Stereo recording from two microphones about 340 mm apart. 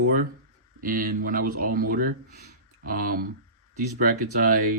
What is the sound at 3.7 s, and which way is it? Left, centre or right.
Speech, right.